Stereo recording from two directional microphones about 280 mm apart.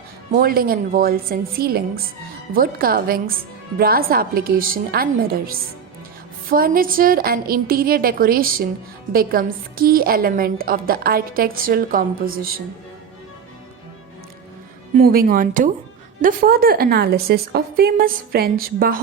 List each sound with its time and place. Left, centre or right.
0.3 s a woman's voice: right
15.0 s a woman's voice: right